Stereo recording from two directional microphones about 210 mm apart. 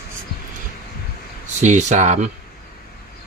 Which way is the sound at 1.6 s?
35° right (ahead or behind).